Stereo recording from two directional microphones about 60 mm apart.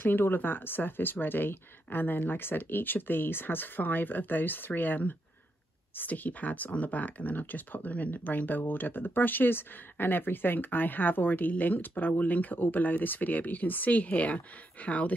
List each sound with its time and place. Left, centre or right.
0.0 s speech: left